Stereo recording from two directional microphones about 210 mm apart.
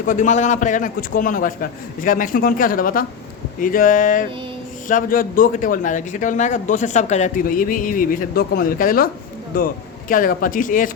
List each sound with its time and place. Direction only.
0.1 s a man's voice: 35° left (ahead or behind)
10.1 s a man's voice: 40° left (ahead or behind)